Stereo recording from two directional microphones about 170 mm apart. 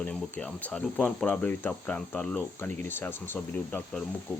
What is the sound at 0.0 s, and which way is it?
Speech, 10° left (ahead or behind).